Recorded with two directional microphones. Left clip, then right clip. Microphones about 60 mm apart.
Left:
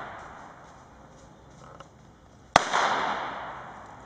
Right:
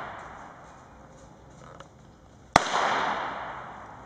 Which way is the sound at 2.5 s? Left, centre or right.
Centre.